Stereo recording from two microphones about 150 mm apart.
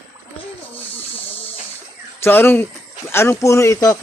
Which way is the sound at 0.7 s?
10° left (ahead or behind).